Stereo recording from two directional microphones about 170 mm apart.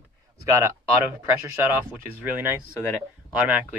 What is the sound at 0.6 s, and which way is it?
Speech, 15° right (ahead or behind).